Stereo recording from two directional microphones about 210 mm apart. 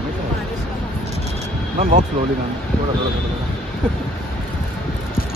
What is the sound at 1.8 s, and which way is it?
Speech, 35° right (ahead or behind).